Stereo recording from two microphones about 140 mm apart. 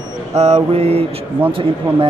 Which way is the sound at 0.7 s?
45° right (ahead or behind).